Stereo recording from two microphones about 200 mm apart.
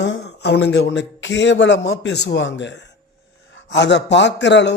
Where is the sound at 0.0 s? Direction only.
60° left (ahead or behind).